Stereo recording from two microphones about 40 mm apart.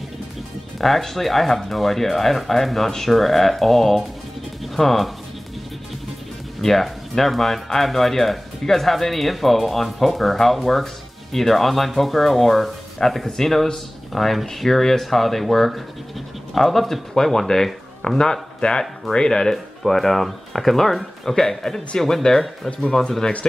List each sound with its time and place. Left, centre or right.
0.7 s speech: centre
6.6 s speech: centre
19.5 s speech: centre
22.7 s speech: left